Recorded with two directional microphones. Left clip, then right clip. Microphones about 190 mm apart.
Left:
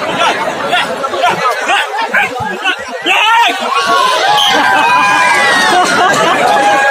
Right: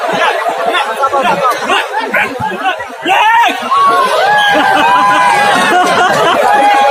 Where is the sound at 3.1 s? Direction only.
30° right (ahead or behind).